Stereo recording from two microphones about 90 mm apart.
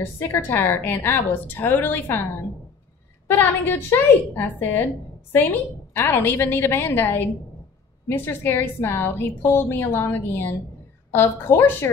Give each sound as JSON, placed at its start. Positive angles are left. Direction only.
{"t": 0.3, "sound": "a woman's voice", "side_deg": 25}
{"t": 3.3, "sound": "a woman's voice", "side_deg": 25}
{"t": 5.9, "sound": "a woman's voice", "side_deg": 25}